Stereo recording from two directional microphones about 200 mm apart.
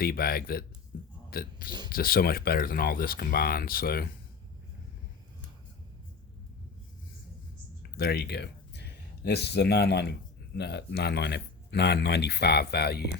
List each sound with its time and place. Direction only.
0.0 s speech: 50° left (ahead or behind)
7.8 s speech: 55° left (ahead or behind)